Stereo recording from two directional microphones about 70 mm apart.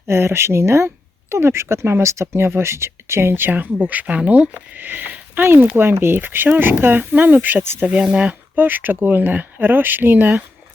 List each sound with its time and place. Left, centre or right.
0.1 s speech: right
8.0 s speech: centre
8.5 s speech: right